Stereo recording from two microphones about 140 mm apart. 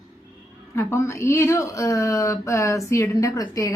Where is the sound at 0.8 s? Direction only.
20° left (ahead or behind).